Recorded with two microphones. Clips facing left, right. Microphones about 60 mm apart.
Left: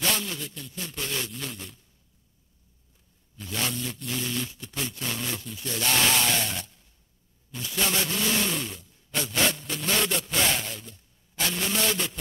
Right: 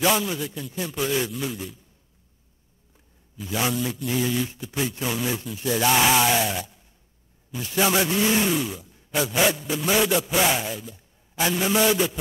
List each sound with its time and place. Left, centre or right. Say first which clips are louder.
0.0 s speech: right 7 dB; centre
3.3 s speech: right 6 dB; centre
8.5 s a sound: right 7 dB; centre
9.3 s speech: right 4 dB; centre